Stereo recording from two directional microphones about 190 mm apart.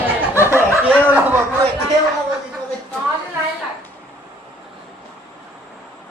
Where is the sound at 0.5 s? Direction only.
10° right (ahead or behind).